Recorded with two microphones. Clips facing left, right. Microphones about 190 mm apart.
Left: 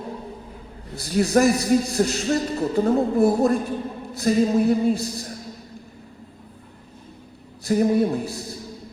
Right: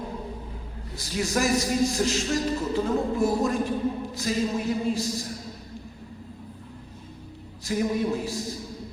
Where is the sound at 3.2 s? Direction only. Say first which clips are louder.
Left 7 dB; 35° left (ahead or behind).